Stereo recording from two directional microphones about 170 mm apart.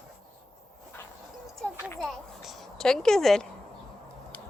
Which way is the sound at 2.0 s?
Centre (ahead or behind).